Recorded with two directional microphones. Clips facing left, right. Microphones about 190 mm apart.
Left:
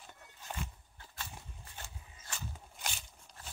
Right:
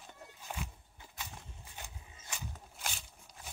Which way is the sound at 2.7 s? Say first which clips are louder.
Even; centre (ahead or behind).